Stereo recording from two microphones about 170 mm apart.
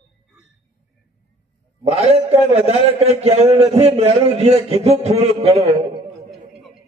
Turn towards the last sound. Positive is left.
turn(degrees=-35)  # may be behind; listen again after turning